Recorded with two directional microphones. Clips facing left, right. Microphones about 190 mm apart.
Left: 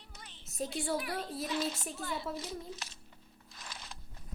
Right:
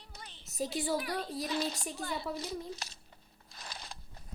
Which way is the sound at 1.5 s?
35° right (ahead or behind).